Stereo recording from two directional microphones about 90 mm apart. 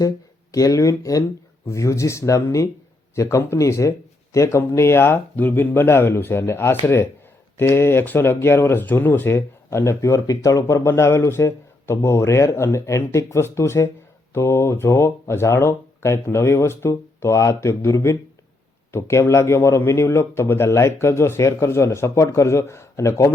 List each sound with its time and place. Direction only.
0.5 s speech: 40° left (ahead or behind)